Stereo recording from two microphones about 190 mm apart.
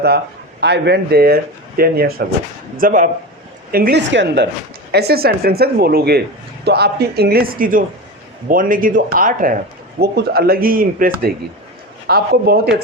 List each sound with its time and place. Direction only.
0.6 s speech: 60° right (ahead or behind)